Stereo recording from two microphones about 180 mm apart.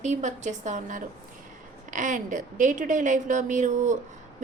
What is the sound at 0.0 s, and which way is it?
A woman's voice, 40° right (ahead or behind).